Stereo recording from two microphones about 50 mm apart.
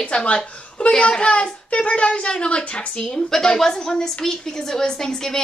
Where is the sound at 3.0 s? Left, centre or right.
Centre.